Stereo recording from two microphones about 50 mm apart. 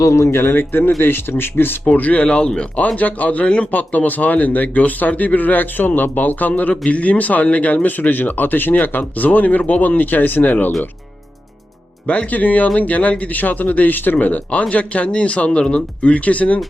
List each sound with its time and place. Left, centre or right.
0.0 s speech: left
0.4 s speech: left
1.8 s speech: left
2.2 s speech: centre
2.7 s speech: left
12.0 s speech: left
14.6 s speech: left